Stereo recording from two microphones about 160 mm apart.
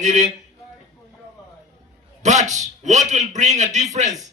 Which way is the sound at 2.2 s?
50° right (ahead or behind).